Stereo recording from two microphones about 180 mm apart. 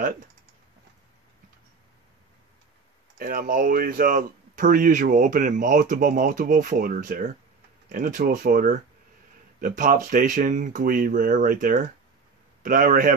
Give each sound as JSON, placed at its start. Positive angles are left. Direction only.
{"t": 3.2, "sound": "speech", "side_deg": -50}